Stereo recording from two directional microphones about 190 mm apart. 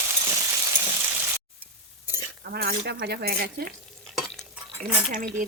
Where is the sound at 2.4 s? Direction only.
55° right (ahead or behind).